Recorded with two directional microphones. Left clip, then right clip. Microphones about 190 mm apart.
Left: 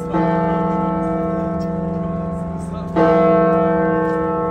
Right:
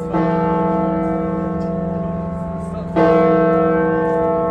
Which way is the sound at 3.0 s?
20° left (ahead or behind).